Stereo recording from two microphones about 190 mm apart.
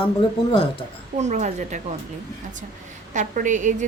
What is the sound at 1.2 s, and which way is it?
Speech, 35° right (ahead or behind).